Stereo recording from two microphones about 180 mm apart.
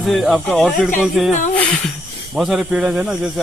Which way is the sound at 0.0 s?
Centre (ahead or behind).